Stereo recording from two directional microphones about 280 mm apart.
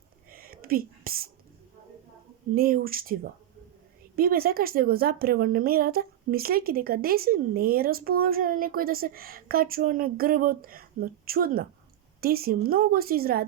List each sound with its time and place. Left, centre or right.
0.3 s whispering: right
2.6 s a woman's voice: right